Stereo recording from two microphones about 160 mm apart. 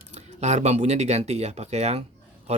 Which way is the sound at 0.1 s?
45° right (ahead or behind).